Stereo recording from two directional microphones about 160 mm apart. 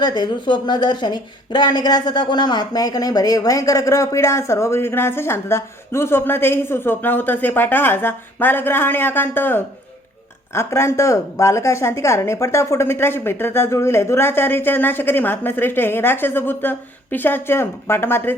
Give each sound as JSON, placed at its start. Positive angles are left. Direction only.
{"t": 0.0, "sound": "a woman's voice", "side_deg": 25}